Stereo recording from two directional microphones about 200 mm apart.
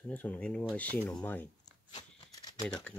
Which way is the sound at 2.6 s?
5° left (ahead or behind).